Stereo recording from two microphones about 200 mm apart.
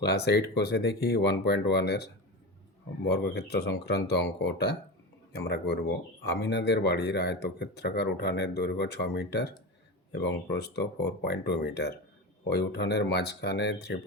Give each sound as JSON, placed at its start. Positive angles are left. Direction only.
{"t": 0.0, "sound": "speech", "side_deg": 55}
{"t": 3.1, "sound": "speech", "side_deg": 55}
{"t": 6.2, "sound": "speech", "side_deg": 60}